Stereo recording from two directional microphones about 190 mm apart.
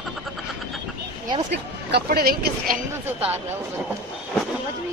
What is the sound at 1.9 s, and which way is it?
Speech, 55° right (ahead or behind).